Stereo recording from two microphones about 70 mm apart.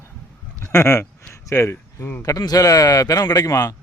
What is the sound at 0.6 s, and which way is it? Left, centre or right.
Speech, left.